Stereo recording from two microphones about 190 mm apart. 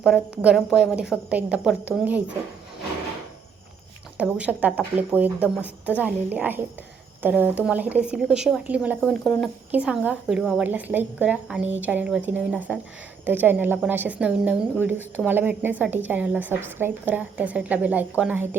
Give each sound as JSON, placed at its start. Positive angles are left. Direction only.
{"t": 0.0, "sound": "a woman's voice", "side_deg": -5}
{"t": 4.2, "sound": "a woman's voice", "side_deg": -5}
{"t": 9.7, "sound": "a woman's voice", "side_deg": -5}